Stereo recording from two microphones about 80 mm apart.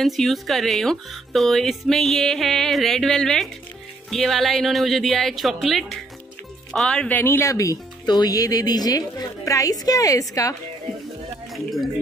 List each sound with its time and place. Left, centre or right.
0.0 s speech: centre
7.1 s speech: left
7.4 s speech: left
11.5 s speech: centre